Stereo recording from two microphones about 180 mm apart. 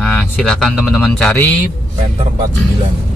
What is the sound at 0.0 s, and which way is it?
A man's voice, 5° left (ahead or behind).